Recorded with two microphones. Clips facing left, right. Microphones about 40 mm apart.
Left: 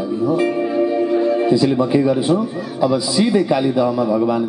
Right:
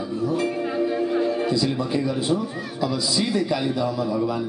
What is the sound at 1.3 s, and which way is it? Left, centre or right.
Music, left.